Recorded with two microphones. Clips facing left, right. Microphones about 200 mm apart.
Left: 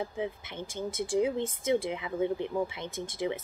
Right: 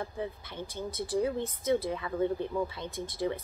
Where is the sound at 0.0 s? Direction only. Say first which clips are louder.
Left 2 dB; 15° left (ahead or behind).